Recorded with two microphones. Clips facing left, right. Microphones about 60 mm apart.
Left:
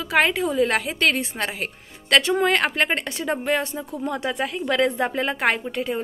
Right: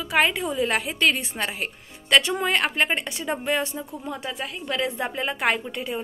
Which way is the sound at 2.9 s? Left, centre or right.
Left.